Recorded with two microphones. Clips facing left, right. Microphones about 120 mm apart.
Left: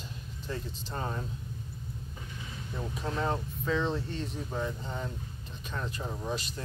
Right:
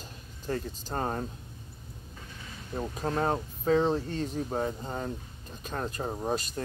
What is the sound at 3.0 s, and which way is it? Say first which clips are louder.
Speech: right 3 dB; 45° right (ahead or behind).